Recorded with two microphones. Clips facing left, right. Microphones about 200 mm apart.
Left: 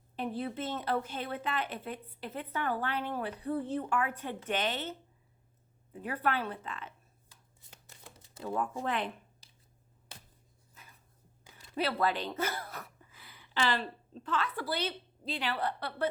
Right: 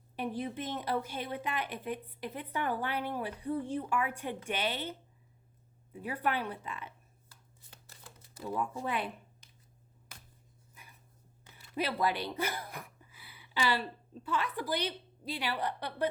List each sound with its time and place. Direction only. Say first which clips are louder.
0.2 s speech: left 1 dB; 15° right (ahead or behind)
6.0 s speech: left 1 dB; 10° right (ahead or behind)
7.9 s shuffling cards: left 2 dB; 25° left (ahead or behind)
8.8 s speech: left 2 dB; 10° right (ahead or behind)
9.4 s finger snapping: right 2 dB; 35° left (ahead or behind)
11.5 s a sound: left 1 dB; 15° left (ahead or behind)
11.8 s speech: left 1 dB; 15° right (ahead or behind)